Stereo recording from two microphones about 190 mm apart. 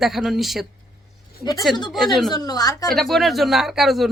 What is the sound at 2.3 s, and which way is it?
Speech, 20° left (ahead or behind).